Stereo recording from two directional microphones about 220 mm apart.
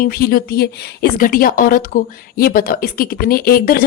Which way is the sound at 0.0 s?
40° left (ahead or behind).